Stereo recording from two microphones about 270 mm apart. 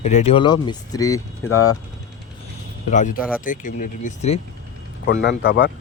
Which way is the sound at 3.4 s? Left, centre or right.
Left.